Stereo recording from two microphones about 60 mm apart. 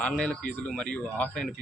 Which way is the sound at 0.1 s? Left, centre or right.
Centre.